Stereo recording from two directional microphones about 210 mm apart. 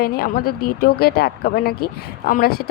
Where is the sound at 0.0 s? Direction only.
45° left (ahead or behind).